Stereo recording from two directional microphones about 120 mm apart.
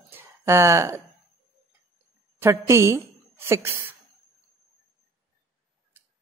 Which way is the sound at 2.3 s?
20° right (ahead or behind).